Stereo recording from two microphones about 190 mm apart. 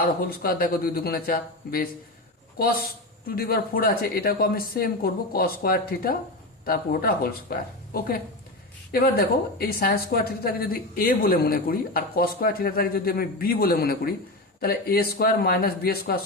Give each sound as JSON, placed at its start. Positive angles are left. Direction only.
{"t": 0.0, "sound": "speech", "side_deg": 50}